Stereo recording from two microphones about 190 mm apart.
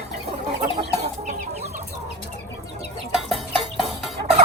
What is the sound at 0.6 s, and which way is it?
Chicken, 40° right (ahead or behind).